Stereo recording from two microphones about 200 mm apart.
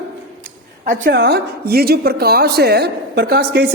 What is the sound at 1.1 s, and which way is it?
A woman's voice, 50° right (ahead or behind).